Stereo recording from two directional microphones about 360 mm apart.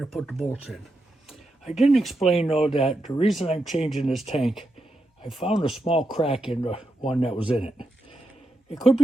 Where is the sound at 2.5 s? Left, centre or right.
Centre.